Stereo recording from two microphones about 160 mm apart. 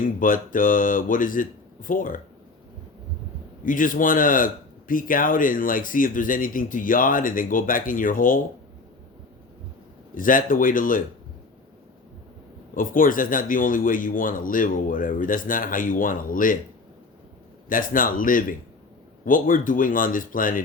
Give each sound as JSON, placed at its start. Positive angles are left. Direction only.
{"t": 0.0, "sound": "speech", "side_deg": 55}
{"t": 3.6, "sound": "speech", "side_deg": 55}
{"t": 10.2, "sound": "speech", "side_deg": 60}
{"t": 12.7, "sound": "speech", "side_deg": 60}
{"t": 17.7, "sound": "speech", "side_deg": 60}